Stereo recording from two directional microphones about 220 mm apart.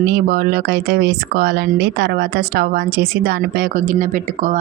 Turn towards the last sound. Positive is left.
turn(degrees=-35)  # may be behind; listen again after turning